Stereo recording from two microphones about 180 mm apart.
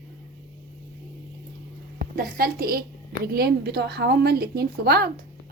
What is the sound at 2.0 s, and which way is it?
A woman's voice, 55° right (ahead or behind).